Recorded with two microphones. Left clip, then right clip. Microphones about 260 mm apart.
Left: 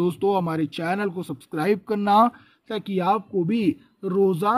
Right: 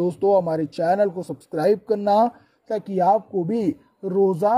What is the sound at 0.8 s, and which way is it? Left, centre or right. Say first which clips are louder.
Speech: right 6 dB; left.